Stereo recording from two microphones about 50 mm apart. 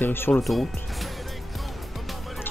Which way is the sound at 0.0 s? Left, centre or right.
Left.